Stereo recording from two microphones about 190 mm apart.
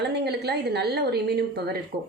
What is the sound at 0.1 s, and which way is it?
A woman's voice, 60° right (ahead or behind).